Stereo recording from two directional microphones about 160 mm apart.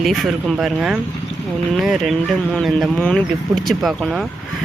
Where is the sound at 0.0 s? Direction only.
Centre (ahead or behind).